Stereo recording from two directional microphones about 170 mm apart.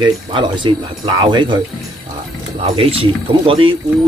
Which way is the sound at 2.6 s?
35° right (ahead or behind).